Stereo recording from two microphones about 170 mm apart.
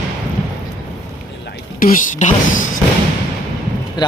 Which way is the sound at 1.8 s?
50° left (ahead or behind).